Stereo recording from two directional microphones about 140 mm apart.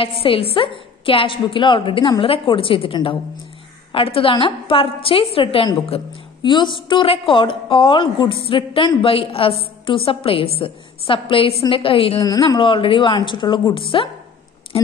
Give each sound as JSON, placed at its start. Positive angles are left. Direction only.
{"t": 0.0, "sound": "a woman's voice", "side_deg": 40}
{"t": 12.2, "sound": "a woman's voice", "side_deg": 25}
{"t": 12.5, "sound": "a woman's voice", "side_deg": 35}